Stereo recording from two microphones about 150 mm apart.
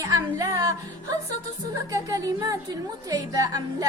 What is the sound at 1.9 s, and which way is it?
Music, 25° right (ahead or behind).